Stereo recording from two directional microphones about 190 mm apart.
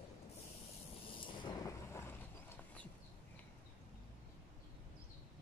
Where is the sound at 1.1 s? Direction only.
25° left (ahead or behind); by 2.9 s 10° left (ahead or behind).